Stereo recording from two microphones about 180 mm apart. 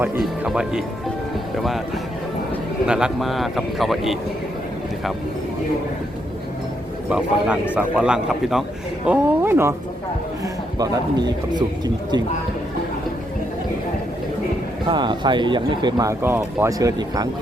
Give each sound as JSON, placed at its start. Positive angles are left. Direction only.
{"t": 0.2, "sound": "a man's voice", "side_deg": -5}
{"t": 2.8, "sound": "a man's voice", "side_deg": -5}
{"t": 7.1, "sound": "a man's voice", "side_deg": -5}
{"t": 14.8, "sound": "speech", "side_deg": -25}